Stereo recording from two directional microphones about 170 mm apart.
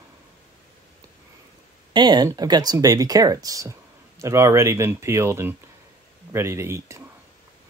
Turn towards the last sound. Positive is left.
turn(degrees=-15)  # may be behind; listen again after turning